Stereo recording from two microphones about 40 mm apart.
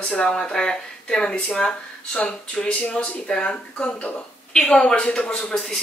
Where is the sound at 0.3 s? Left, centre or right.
Centre.